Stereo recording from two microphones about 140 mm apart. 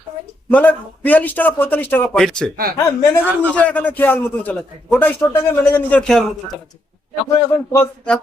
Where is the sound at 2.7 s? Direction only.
25° left (ahead or behind).